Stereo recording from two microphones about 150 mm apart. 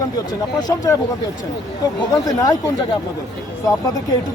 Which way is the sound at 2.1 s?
25° left (ahead or behind).